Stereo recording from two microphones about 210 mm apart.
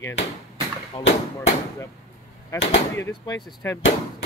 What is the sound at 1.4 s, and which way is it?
Gunshot, 15° left (ahead or behind).